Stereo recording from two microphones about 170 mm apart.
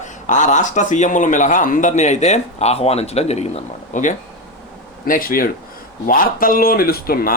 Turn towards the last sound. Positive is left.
turn(degrees=60)  # may be behind; listen again after turning